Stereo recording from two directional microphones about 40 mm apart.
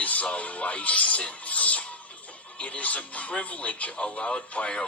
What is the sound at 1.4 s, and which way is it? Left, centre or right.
Music, left.